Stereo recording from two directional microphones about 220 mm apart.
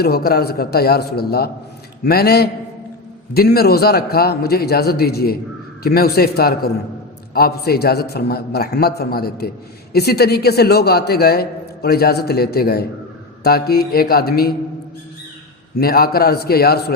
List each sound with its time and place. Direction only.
0.0 s a man's voice: 45° left (ahead or behind)
15.8 s a man's voice: 45° left (ahead or behind)